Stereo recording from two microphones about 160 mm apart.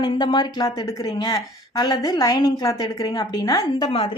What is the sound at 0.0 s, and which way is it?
Speech, 30° left (ahead or behind).